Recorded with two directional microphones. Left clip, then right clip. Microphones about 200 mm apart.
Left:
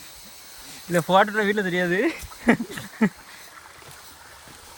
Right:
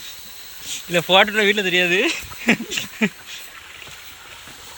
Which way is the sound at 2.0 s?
25° left (ahead or behind).